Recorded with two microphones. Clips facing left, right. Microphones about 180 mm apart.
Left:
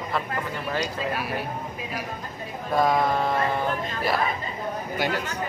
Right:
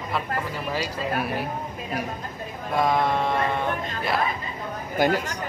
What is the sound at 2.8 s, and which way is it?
Speech, centre (ahead or behind).